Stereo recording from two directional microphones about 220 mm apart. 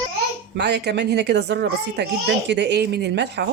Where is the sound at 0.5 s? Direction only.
50° right (ahead or behind).